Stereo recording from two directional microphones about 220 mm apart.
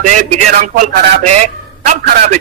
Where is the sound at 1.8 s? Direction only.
35° right (ahead or behind).